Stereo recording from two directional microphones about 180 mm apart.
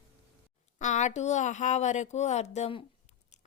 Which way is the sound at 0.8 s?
45° left (ahead or behind).